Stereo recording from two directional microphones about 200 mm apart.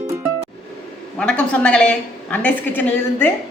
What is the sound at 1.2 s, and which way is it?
A woman's voice, 5° left (ahead or behind).